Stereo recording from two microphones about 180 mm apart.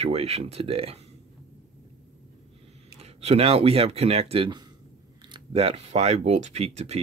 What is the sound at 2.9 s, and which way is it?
Speech, 35° right (ahead or behind).